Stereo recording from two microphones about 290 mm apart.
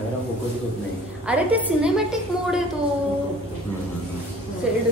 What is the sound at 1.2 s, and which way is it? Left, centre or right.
A woman's voice, centre.